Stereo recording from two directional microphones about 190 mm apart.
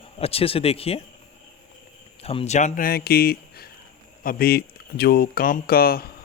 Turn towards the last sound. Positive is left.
turn(degrees=50)  # may be behind; listen again after turning